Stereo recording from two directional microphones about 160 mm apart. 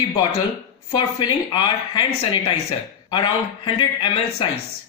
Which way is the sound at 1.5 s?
30° left (ahead or behind).